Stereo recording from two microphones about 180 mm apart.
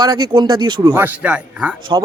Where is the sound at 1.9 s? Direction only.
25° right (ahead or behind).